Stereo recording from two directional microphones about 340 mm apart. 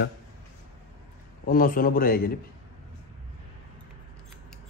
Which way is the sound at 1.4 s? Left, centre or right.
Left.